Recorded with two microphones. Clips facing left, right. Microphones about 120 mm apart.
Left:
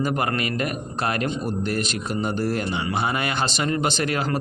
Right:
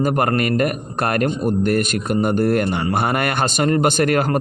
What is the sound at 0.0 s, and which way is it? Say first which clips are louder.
A man's voice: right 6 dB; 50° right (ahead or behind).